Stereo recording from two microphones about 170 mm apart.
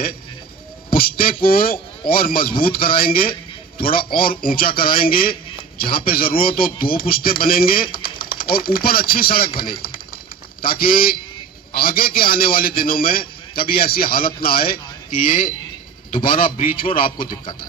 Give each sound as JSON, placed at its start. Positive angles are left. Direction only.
{"t": 0.9, "sound": "a man's voice", "side_deg": 55}
{"t": 16.9, "sound": "a man's voice", "side_deg": 30}